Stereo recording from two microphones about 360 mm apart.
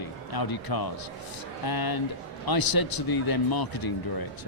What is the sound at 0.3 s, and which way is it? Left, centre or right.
Speech, left.